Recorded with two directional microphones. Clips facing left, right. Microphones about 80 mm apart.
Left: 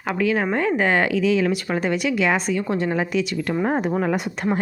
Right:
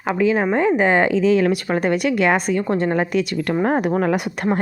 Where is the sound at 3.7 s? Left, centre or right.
Right.